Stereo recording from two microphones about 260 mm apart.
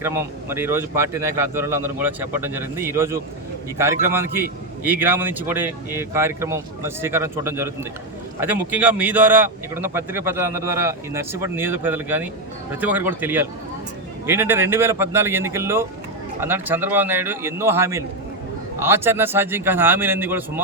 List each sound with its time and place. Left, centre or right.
0.0 s a man's voice: centre